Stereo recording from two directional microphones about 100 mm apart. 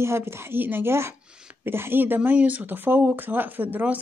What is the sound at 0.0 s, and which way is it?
Speech, 25° right (ahead or behind).